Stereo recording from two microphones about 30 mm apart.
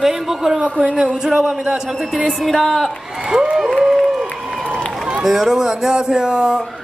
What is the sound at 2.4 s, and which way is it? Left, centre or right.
Speech, centre.